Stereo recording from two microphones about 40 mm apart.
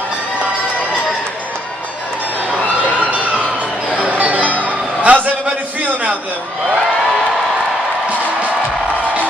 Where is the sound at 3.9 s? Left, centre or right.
Right.